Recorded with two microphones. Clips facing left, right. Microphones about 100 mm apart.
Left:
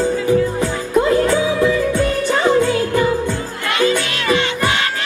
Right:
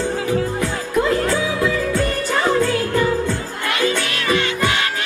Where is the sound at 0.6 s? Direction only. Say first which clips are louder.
Left 3 dB; 25° left (ahead or behind).